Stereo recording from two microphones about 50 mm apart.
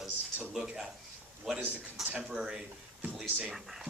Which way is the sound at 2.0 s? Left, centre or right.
Right.